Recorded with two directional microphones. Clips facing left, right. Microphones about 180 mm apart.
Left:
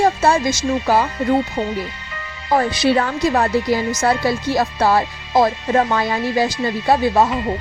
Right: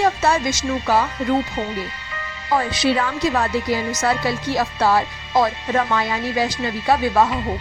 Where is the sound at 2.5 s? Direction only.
45° left (ahead or behind).